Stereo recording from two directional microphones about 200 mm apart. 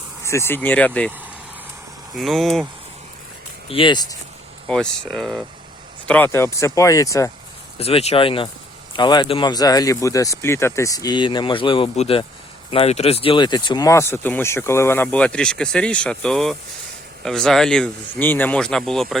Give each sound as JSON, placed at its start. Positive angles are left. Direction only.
{"t": 0.3, "sound": "speech", "side_deg": 10}
{"t": 2.1, "sound": "speech", "side_deg": 0}
{"t": 3.7, "sound": "speech", "side_deg": 25}
{"t": 4.7, "sound": "speech", "side_deg": 5}
{"t": 7.8, "sound": "speech", "side_deg": 30}